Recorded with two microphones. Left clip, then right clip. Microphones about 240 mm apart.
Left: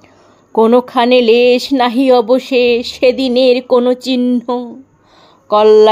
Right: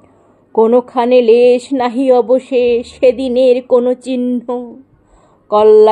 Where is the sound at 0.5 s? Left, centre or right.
Left.